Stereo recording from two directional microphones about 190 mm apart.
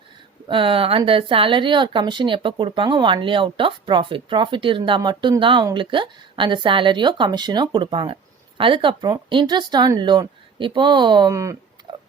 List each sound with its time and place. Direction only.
0.4 s speech: 25° right (ahead or behind)